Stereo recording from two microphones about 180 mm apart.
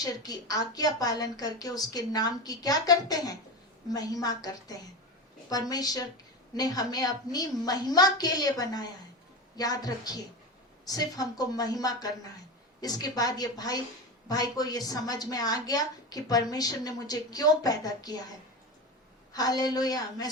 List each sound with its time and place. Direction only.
0.0 s a woman's voice: 20° left (ahead or behind)
19.3 s a woman's voice: 20° left (ahead or behind)